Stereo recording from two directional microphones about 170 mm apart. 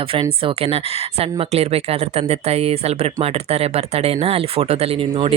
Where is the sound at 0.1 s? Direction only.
30° right (ahead or behind).